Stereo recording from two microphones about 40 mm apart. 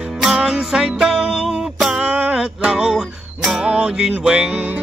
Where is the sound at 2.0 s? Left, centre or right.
Right.